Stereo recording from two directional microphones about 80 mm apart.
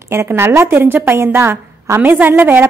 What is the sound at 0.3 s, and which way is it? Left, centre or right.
A woman's voice, right.